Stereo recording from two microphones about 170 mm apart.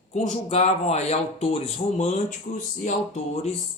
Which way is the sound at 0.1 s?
45° left (ahead or behind).